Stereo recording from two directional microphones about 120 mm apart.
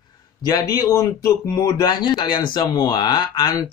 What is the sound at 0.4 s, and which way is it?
Speech, 35° left (ahead or behind).